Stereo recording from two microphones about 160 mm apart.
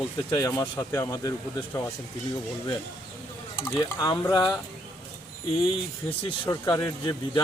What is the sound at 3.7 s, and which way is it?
Speech, 25° left (ahead or behind).